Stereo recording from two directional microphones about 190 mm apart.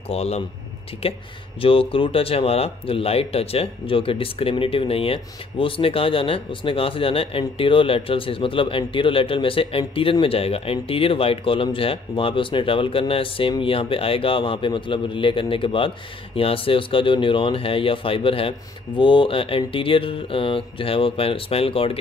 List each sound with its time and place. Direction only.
0.1 s speech: 30° left (ahead or behind)